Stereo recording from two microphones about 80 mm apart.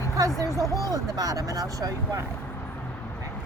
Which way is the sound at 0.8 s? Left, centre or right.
Right.